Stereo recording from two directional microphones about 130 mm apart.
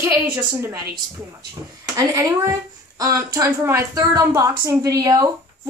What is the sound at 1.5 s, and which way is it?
Speech, 25° right (ahead or behind).